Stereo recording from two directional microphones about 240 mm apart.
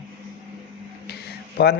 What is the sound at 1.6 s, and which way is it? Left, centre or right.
Speech, left.